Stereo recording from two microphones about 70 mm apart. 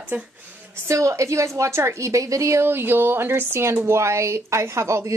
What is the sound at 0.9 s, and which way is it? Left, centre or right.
A woman's voice, right.